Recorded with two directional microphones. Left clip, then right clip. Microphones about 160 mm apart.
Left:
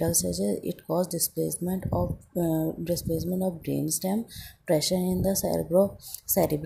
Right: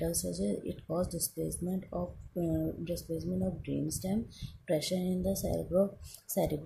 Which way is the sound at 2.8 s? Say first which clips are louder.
Left 8 dB; 30° left (ahead or behind).